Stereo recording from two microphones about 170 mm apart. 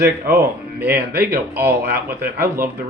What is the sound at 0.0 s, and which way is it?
Speech, 65° right (ahead or behind).